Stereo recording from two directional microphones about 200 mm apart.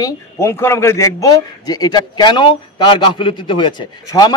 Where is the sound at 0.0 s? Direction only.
15° left (ahead or behind).